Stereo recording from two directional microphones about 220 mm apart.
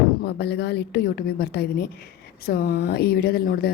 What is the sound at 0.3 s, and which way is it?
Speech, 50° left (ahead or behind).